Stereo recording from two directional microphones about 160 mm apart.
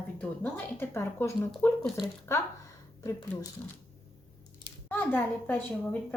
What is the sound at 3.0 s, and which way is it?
Speech, 20° left (ahead or behind).